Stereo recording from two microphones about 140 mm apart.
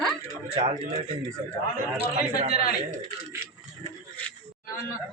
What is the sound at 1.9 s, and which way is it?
Speech, 50° right (ahead or behind).